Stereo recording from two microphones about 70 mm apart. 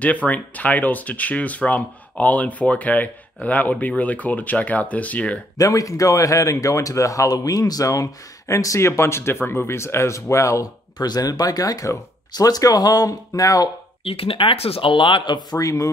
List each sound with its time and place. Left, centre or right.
0.0 s speech: left
5.6 s speech: left
15.2 s speech: left
15.6 s speech: left